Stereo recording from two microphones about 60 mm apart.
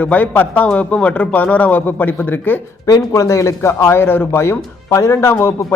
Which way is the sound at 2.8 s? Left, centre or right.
Left.